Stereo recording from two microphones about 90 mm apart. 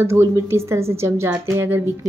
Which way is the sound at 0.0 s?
30° right (ahead or behind).